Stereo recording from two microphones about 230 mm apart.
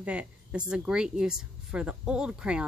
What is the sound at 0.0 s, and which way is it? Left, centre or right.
Speech, centre.